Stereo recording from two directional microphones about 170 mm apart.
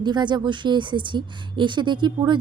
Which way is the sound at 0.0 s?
25° right (ahead or behind).